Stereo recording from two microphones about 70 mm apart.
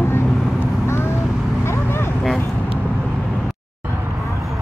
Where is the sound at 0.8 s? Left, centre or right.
Left.